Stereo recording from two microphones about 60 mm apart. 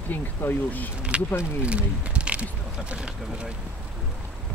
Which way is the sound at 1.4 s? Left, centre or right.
Centre.